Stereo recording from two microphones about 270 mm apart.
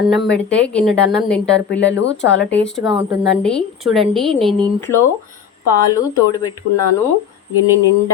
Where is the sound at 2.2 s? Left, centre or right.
Left.